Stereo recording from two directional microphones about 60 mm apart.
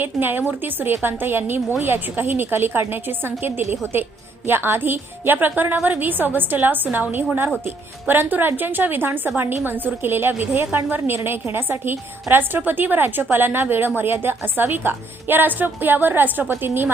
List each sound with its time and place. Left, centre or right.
0.0 s a woman's voice: right